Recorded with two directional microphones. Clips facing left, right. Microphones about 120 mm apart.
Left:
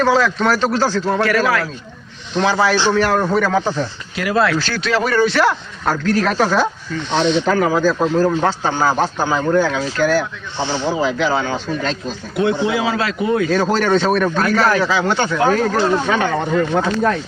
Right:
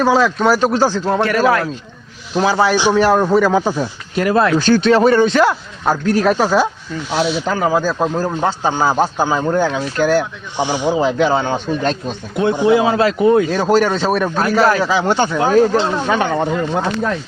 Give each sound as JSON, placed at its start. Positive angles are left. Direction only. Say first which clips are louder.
{"t": 0.0, "sound": "a man's voice", "louder": "right 2 dB", "side_deg": -10}
{"t": 2.3, "sound": "a man's voice", "louder": "right 2 dB", "side_deg": -5}
{"t": 7.5, "sound": "a man's voice", "louder": "left 1 dB", "side_deg": -20}
{"t": 12.7, "sound": "speech", "louder": "right 6 dB", "side_deg": -25}
{"t": 13.5, "sound": "a man's voice", "louder": "right 1 dB", "side_deg": -10}